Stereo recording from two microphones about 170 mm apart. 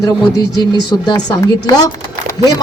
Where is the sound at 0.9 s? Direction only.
25° left (ahead or behind).